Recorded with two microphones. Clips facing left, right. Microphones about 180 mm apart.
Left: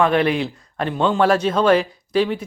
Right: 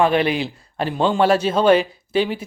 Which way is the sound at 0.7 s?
30° right (ahead or behind).